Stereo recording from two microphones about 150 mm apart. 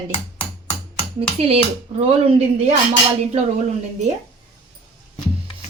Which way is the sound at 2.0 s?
45° right (ahead or behind).